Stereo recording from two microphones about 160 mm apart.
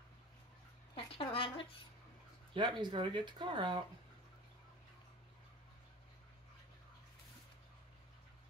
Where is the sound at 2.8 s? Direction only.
30° right (ahead or behind).